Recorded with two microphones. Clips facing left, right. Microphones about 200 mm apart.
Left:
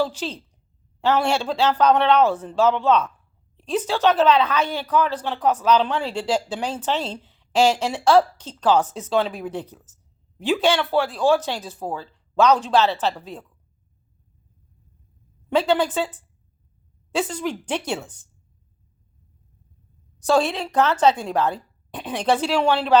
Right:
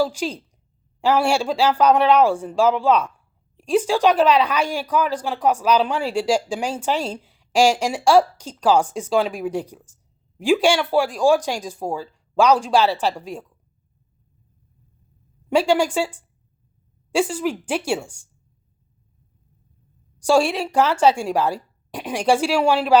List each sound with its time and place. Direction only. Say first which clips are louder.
0.0 s speech: right 3 dB; 10° right (ahead or behind)
15.4 s speech: right 2 dB; 10° right (ahead or behind)
20.2 s speech: right 2 dB; 10° right (ahead or behind)